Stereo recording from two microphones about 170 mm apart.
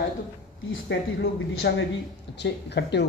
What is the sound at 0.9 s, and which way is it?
Speech, 90° left.